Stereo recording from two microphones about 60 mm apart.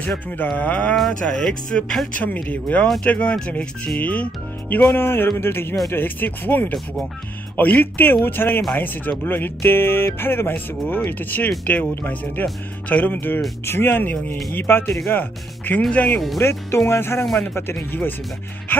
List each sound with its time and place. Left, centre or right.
0.4 s speech: left
1.2 s speech: centre
2.1 s speech: left
4.9 s speech: left
16.3 s speech: left